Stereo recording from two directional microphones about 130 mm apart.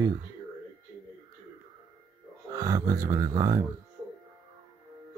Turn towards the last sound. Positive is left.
turn(degrees=-30)  # may be behind; listen again after turning